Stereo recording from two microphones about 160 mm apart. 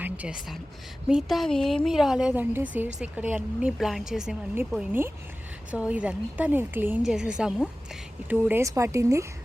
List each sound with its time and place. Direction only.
0.0 s a woman's voice: 10° right (ahead or behind)